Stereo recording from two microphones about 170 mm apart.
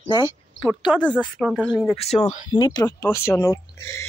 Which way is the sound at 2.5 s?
25° left (ahead or behind).